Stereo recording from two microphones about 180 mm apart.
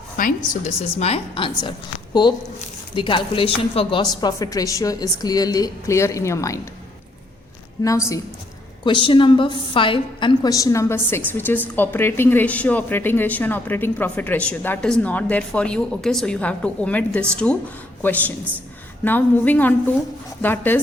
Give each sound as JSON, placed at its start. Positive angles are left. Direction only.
{"t": 0.2, "sound": "a woman's voice", "side_deg": 45}
{"t": 7.9, "sound": "a woman's voice", "side_deg": 20}